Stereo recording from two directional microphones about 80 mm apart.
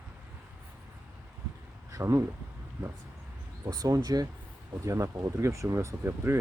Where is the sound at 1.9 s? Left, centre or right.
Right.